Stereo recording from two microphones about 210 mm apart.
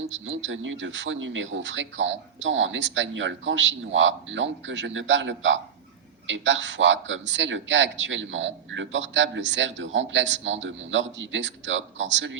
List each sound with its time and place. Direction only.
0.3 s a man's voice: 65° right (ahead or behind)